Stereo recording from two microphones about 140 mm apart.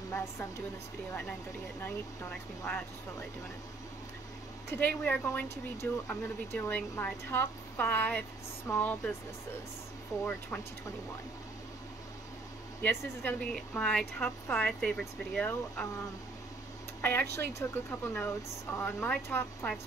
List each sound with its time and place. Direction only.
0.1 s a woman's voice: 20° left (ahead or behind)
1.8 s speech: 15° left (ahead or behind)
4.6 s speech: 10° left (ahead or behind)
10.1 s a woman's voice: 20° left (ahead or behind)
12.8 s speech: 15° left (ahead or behind)
17.0 s speech: 15° left (ahead or behind)